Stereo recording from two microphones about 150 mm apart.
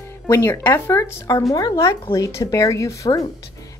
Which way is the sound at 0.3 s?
15° left (ahead or behind).